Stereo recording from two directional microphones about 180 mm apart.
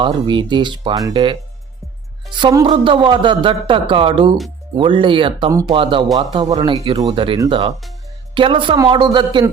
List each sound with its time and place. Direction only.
0.0 s a man's voice: 25° right (ahead or behind)
5.5 s speech: 20° right (ahead or behind)
5.7 s a man's voice: 30° right (ahead or behind)